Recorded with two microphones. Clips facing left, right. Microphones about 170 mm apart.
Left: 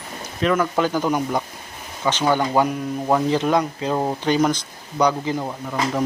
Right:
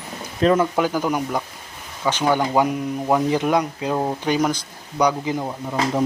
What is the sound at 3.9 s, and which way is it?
Speech, centre (ahead or behind).